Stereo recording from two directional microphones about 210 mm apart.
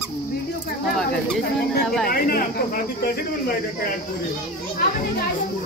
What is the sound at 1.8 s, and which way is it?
Speech, centre (ahead or behind).